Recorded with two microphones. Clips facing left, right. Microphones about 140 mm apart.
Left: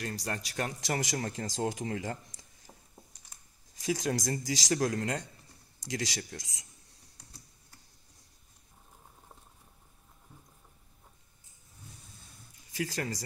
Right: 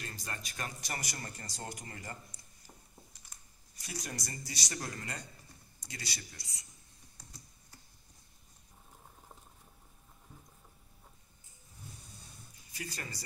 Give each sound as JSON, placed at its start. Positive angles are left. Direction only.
{"t": 0.0, "sound": "speech", "side_deg": 75}
{"t": 3.7, "sound": "speech", "side_deg": 90}
{"t": 12.7, "sound": "speech", "side_deg": 90}